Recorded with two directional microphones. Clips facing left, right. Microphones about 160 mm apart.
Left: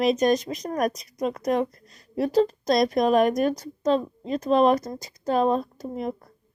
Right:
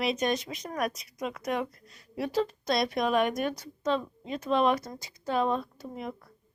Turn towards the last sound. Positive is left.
turn(degrees=40)  # may be behind; listen again after turning